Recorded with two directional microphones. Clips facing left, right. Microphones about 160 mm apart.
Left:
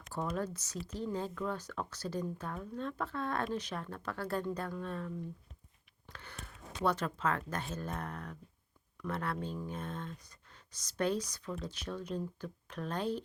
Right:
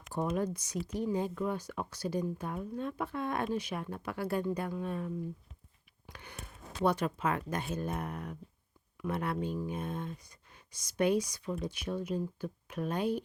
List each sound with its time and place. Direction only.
0.1 s speech: 15° right (ahead or behind)